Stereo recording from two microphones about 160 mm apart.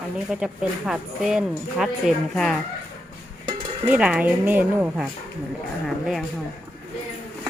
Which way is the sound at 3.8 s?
10° right (ahead or behind).